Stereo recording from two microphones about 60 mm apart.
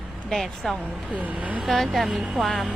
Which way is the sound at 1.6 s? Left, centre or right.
Centre.